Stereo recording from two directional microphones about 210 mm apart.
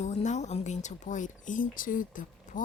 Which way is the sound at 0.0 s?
35° left (ahead or behind).